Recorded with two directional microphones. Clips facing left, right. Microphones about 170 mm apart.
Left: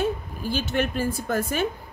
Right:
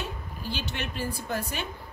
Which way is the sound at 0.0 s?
45° left (ahead or behind).